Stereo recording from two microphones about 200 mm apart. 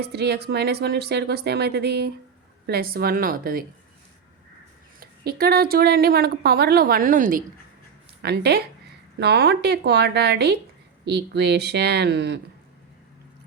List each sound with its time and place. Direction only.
0.0 s a woman's voice: 55° right (ahead or behind)
4.9 s a woman's voice: 50° right (ahead or behind)
8.2 s a woman's voice: 55° right (ahead or behind)